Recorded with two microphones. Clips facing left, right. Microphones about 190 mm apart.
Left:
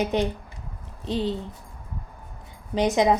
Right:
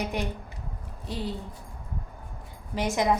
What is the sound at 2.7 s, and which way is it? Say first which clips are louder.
Speech: left 5 dB; 20° left (ahead or behind).